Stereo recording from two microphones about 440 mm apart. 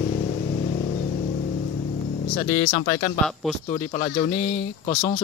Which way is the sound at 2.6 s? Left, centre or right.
Centre.